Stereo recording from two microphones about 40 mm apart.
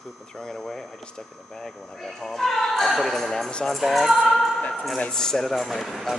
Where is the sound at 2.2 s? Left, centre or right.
Centre.